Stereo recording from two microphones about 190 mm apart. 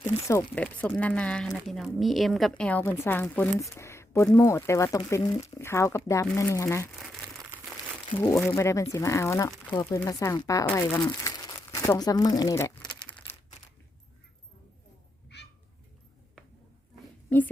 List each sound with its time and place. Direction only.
0.0 s speech: 15° left (ahead or behind)
8.1 s speech: 15° left (ahead or behind)
11.2 s crumpling: 20° left (ahead or behind)
15.3 s cat: 65° left (ahead or behind)
17.2 s a sound: 10° left (ahead or behind)